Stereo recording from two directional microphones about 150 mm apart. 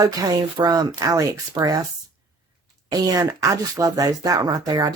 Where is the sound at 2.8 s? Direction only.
25° right (ahead or behind).